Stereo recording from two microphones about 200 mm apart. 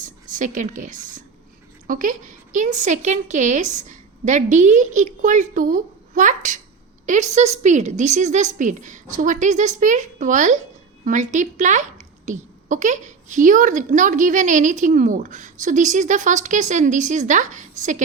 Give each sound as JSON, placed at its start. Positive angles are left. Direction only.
{"t": 0.0, "sound": "a woman's voice", "side_deg": -40}